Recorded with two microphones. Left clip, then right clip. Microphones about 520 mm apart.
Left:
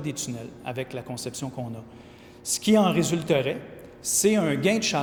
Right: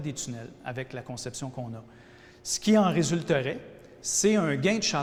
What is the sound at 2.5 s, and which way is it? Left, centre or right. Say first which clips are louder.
A man's voice: left 2 dB; right.